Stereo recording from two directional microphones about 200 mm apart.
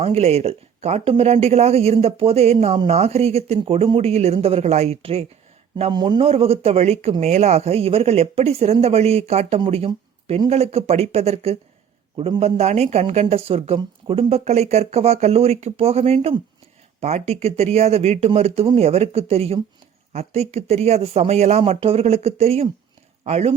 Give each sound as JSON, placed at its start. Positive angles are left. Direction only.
{"t": 0.2, "sound": "a man's voice", "side_deg": -30}